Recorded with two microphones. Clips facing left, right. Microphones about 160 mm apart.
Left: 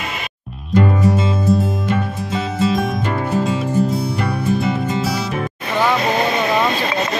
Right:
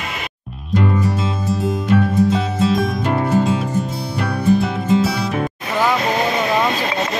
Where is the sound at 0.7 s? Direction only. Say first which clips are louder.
Left 3 dB; centre (ahead or behind).